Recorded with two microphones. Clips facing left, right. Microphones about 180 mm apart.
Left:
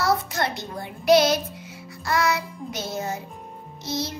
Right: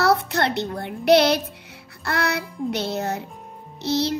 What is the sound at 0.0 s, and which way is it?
A child's voice, 65° right (ahead or behind).